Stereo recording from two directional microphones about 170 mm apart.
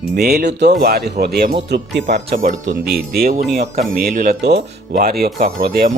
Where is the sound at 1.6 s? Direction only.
90° right.